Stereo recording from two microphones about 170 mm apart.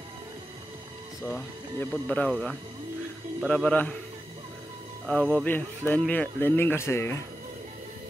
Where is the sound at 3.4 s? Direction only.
5° left (ahead or behind).